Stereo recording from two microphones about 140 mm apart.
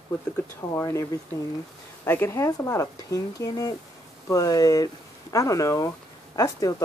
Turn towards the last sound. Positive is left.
turn(degrees=25)  # may be behind; listen again after turning